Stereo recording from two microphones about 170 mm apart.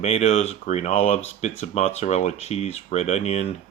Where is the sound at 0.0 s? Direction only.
40° left (ahead or behind).